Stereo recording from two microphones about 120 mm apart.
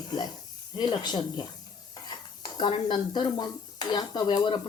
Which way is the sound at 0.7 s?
35° left (ahead or behind).